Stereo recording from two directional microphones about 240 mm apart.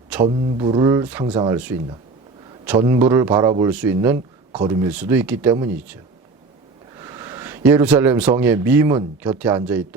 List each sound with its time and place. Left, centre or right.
0.3 s speech: right